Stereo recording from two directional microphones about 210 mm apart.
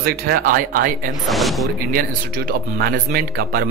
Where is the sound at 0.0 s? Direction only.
45° right (ahead or behind).